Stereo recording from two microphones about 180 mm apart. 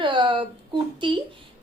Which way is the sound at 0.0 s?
25° right (ahead or behind).